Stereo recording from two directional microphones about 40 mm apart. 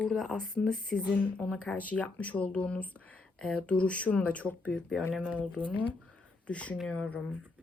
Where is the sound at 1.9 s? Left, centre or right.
Left.